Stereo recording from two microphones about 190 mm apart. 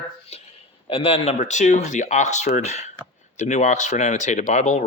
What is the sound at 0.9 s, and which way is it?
Speech, 30° left (ahead or behind).